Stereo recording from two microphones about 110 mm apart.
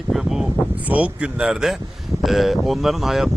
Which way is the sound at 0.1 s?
Centre (ahead or behind).